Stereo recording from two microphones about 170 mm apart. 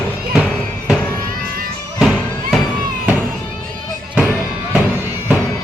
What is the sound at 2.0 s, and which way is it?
Music, centre (ahead or behind).